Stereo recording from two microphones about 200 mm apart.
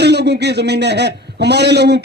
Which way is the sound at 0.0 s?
55° right (ahead or behind).